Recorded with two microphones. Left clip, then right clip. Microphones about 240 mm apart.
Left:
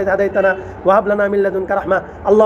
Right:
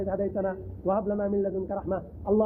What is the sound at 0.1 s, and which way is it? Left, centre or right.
A man's voice, centre.